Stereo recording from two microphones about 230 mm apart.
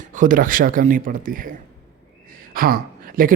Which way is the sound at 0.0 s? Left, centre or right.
Right.